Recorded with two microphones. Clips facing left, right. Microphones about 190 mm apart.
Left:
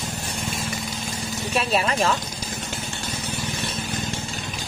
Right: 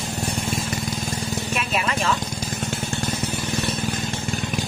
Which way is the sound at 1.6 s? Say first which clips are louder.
Left 5 dB; 35° left (ahead or behind).